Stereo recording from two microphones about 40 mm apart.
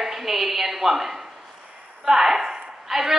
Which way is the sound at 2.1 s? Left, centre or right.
Centre.